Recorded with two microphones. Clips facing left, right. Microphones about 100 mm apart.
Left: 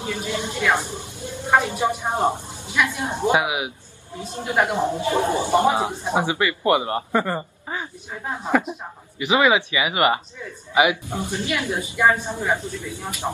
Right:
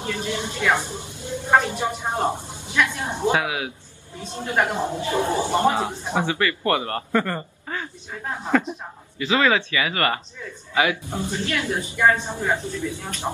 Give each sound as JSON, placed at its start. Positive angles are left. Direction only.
{"t": 0.0, "sound": "speech", "side_deg": 20}